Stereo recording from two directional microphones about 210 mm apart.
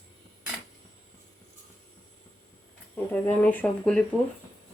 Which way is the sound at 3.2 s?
10° left (ahead or behind).